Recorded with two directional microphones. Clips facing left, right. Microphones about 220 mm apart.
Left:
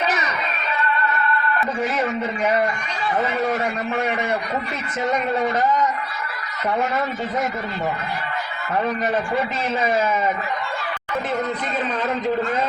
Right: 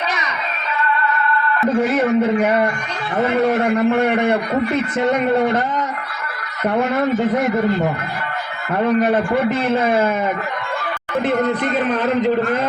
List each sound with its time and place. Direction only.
1.7 s a man's voice: 60° right (ahead or behind)
8.7 s a man's voice: 60° right (ahead or behind)